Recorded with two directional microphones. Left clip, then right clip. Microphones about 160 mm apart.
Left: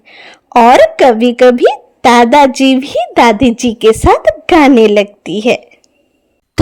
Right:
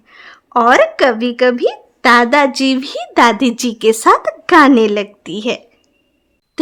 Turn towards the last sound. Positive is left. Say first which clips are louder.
# left 8 dB
turn(degrees=20)  # may be behind; listen again after turning